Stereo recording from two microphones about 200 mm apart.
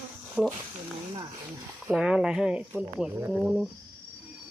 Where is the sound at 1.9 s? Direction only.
5° right (ahead or behind).